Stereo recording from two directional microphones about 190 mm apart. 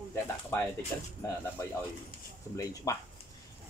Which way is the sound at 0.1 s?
10° left (ahead or behind).